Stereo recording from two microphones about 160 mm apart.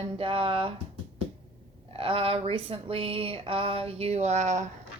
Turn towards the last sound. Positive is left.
turn(degrees=-45)  # may be behind; listen again after turning